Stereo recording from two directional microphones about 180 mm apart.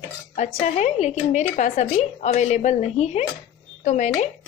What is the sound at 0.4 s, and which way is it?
Speech, 40° left (ahead or behind).